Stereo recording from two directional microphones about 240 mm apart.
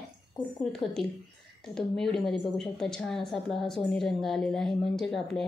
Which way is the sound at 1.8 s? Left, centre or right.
Centre.